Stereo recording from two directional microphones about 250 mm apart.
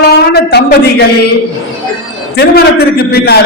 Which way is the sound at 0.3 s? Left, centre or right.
Left.